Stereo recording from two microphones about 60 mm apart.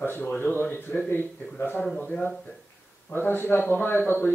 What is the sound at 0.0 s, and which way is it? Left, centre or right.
A man's voice, left.